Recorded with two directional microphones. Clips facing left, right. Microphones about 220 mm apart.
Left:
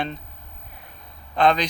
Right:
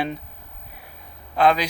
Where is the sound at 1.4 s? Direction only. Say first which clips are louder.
Right 1 dB; 5° right (ahead or behind).